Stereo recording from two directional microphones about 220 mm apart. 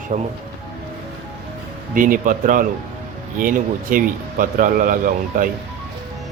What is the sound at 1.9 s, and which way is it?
Speech, 40° right (ahead or behind).